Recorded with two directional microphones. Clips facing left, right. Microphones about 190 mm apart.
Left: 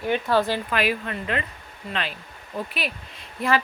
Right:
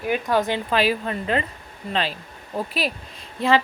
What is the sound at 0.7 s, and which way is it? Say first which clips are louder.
A woman's voice: right 7 dB; 30° right (ahead or behind).